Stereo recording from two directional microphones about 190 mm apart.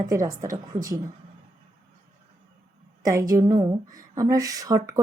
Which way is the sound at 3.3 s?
20° right (ahead or behind).